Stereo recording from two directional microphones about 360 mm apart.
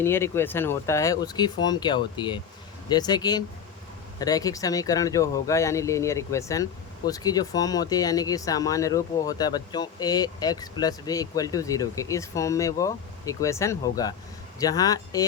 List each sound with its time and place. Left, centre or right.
0.0 s speech: centre